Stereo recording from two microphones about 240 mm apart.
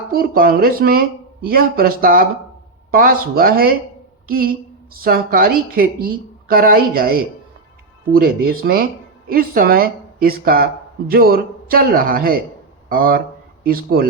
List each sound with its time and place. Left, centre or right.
0.1 s speech: right
8.1 s speech: right